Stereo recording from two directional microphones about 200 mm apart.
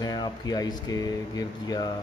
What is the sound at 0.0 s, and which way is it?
Speech, 20° left (ahead or behind).